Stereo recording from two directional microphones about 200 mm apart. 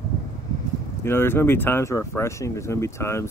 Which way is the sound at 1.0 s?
10° left (ahead or behind).